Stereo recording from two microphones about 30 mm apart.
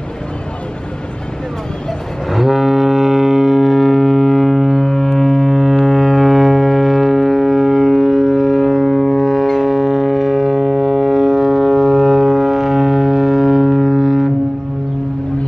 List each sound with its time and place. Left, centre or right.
2.3 s foghorn: centre
9.7 s music: centre
13.9 s music: centre